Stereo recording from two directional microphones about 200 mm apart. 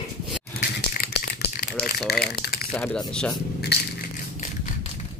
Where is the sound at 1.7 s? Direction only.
5° left (ahead or behind).